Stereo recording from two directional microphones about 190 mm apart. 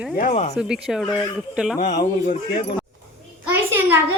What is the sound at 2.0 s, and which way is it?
Speech, 40° left (ahead or behind).